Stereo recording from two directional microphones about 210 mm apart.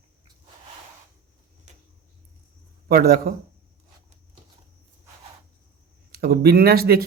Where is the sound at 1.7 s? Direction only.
35° right (ahead or behind).